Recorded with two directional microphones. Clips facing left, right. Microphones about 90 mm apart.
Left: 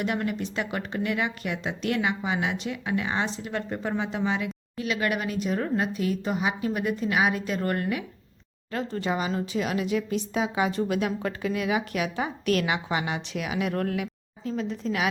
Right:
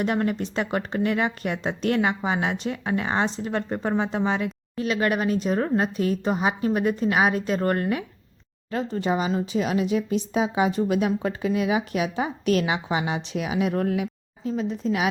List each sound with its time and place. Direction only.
0.0 s speech: 35° right (ahead or behind)
8.7 s speech: 20° right (ahead or behind)